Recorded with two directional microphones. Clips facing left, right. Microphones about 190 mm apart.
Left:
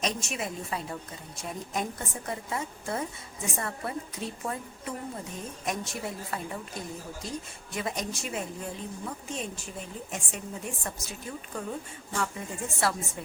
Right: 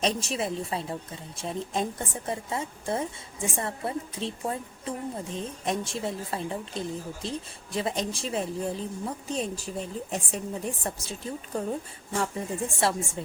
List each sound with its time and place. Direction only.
0.0 s a woman's voice: 30° right (ahead or behind)